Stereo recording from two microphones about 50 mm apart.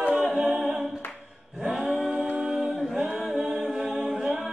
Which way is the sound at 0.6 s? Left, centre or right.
Centre.